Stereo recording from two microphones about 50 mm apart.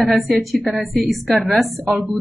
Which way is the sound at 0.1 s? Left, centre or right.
Centre.